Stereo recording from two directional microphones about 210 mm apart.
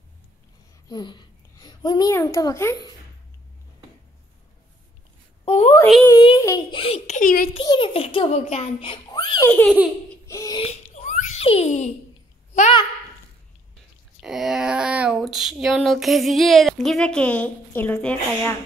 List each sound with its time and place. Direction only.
0.8 s a child's voice: 20° left (ahead or behind)
5.4 s a woman's voice: 30° left (ahead or behind)
7.5 s a child's voice: 25° left (ahead or behind)
9.5 s a child's voice: 10° left (ahead or behind)
10.2 s a sound: 15° left (ahead or behind)
10.6 s giggle: 30° left (ahead or behind)
14.2 s a sound: centre (ahead or behind)